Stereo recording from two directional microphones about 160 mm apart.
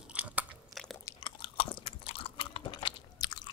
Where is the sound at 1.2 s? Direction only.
30° left (ahead or behind).